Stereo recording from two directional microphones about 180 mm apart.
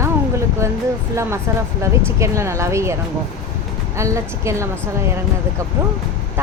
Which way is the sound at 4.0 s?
15° right (ahead or behind).